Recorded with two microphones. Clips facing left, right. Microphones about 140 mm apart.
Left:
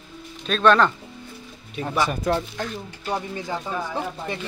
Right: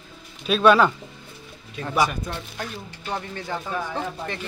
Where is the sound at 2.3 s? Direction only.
90° left.